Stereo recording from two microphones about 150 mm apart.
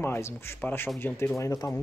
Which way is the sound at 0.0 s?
15° left (ahead or behind).